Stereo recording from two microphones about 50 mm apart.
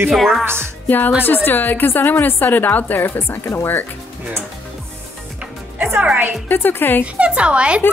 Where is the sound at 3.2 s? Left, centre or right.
Left.